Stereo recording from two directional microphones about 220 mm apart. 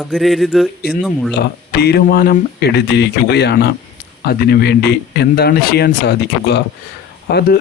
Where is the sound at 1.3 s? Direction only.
45° left (ahead or behind).